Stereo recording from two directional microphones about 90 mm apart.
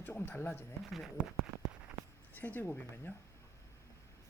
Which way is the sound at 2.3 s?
20° left (ahead or behind).